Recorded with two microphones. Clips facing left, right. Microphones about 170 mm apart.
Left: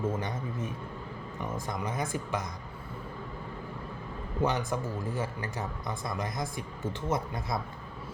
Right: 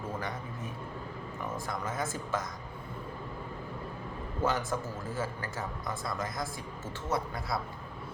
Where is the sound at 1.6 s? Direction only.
15° left (ahead or behind).